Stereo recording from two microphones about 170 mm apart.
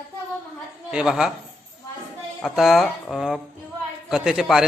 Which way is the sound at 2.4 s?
Centre (ahead or behind).